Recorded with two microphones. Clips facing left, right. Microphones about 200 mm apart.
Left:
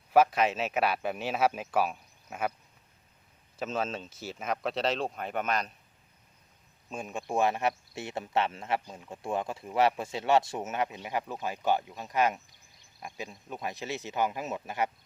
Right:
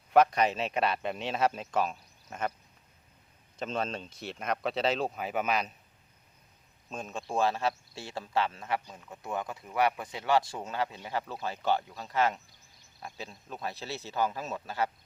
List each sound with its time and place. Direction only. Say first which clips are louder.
0.1 s a man's voice: even; 5° left (ahead or behind)
3.6 s a man's voice: left 1 dB; 5° left (ahead or behind)
6.9 s speech: left 2 dB; 10° left (ahead or behind)